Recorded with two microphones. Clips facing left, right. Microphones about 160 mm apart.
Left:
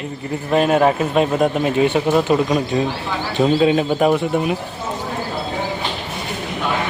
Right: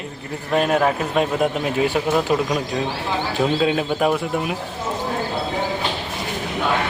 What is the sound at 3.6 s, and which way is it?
Speech, centre (ahead or behind).